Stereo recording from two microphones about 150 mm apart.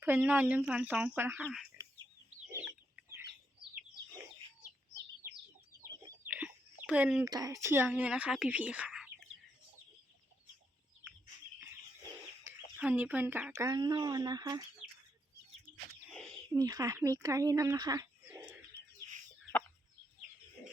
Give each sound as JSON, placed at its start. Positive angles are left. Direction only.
{"t": 0.0, "sound": "speech", "side_deg": -10}
{"t": 5.8, "sound": "chicken", "side_deg": -25}
{"t": 6.2, "sound": "bird", "side_deg": -10}
{"t": 7.3, "sound": "speech", "side_deg": -25}
{"t": 12.7, "sound": "speech", "side_deg": -10}
{"t": 13.7, "sound": "speech", "side_deg": -25}
{"t": 16.5, "sound": "speech", "side_deg": -25}